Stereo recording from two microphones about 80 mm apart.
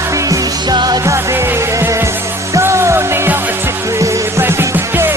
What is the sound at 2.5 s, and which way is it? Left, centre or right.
Music, right.